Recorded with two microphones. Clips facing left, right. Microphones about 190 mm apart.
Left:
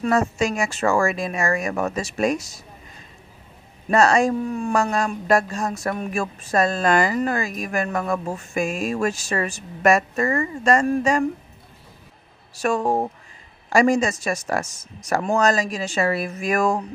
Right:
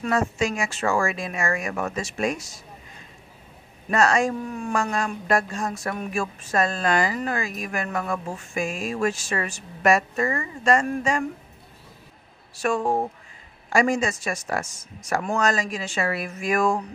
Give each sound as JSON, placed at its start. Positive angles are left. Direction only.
{"t": 0.0, "sound": "speech", "side_deg": 40}
{"t": 3.9, "sound": "speech", "side_deg": 35}
{"t": 12.5, "sound": "speech", "side_deg": 40}